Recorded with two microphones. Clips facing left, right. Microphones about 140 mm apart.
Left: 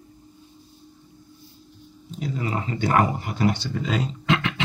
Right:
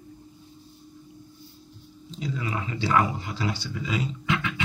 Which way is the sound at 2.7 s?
50° left (ahead or behind).